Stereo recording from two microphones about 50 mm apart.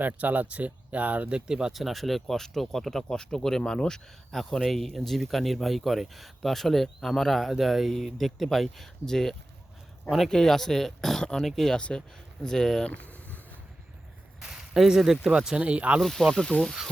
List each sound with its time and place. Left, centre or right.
0.0 s speech: right
1.5 s speech: centre
1.7 s speech: centre
3.1 s speech: centre
11.8 s speech: centre
12.9 s a sound: left
14.4 s speech: centre
15.5 s speech: right
16.0 s speech: centre
16.3 s speech: centre